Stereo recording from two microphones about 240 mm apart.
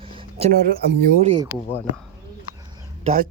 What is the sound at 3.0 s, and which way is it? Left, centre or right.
Speech, right.